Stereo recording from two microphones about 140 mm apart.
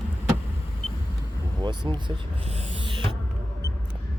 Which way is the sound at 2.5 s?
40° right (ahead or behind).